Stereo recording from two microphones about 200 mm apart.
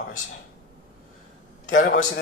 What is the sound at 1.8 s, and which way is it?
Speech, 45° left (ahead or behind).